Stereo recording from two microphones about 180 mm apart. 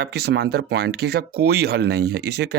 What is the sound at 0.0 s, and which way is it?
Speech, 65° right (ahead or behind).